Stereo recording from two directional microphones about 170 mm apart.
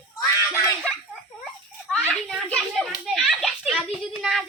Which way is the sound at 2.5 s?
Centre (ahead or behind).